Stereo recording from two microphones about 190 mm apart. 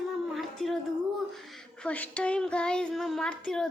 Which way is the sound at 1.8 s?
5° left (ahead or behind).